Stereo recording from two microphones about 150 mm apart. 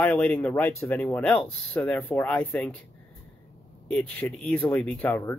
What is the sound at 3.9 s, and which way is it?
Speech, 10° left (ahead or behind).